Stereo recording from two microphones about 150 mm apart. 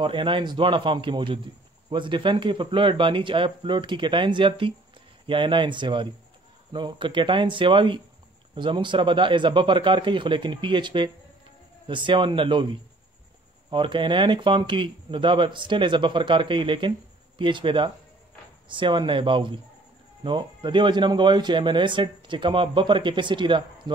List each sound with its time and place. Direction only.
0.0 s a man's voice: 35° right (ahead or behind)